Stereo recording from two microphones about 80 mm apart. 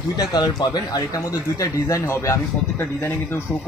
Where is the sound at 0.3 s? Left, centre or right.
Left.